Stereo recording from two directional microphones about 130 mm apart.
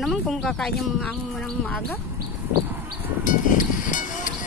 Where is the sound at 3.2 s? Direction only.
85° left.